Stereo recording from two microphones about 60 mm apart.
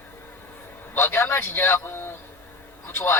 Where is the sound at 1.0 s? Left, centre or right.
Left.